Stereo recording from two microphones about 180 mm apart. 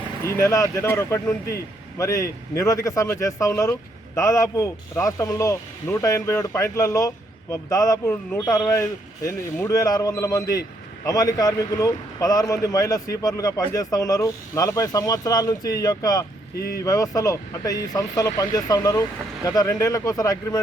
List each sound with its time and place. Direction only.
0.3 s a man's voice: 15° left (ahead or behind)
16.6 s speech: 60° left (ahead or behind)
16.8 s a man's voice: 15° left (ahead or behind)